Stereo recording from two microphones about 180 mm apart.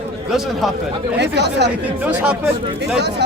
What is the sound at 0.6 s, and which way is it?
Speech, centre (ahead or behind).